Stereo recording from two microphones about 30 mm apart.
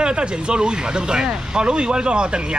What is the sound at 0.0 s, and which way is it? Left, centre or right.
Speech, right.